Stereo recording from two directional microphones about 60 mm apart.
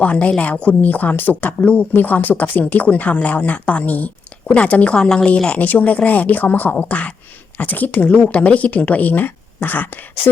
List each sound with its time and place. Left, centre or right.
0.0 s speech: left
5.5 s speech: left